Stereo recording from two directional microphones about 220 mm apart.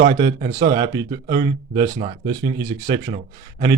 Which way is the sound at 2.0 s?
30° right (ahead or behind).